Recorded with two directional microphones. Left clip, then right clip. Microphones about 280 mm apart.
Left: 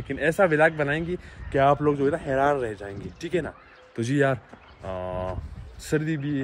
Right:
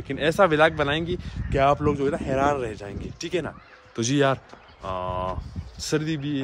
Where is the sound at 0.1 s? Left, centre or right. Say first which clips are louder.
Right 1 dB; centre.